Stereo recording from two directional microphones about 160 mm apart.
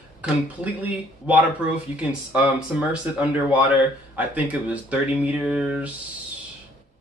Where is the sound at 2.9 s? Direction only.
10° right (ahead or behind).